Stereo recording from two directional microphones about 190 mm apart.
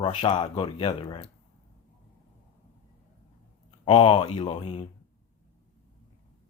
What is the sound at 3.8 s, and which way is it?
Speech, 25° left (ahead or behind).